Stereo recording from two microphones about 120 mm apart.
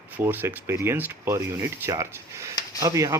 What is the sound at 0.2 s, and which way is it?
Speech, 15° right (ahead or behind).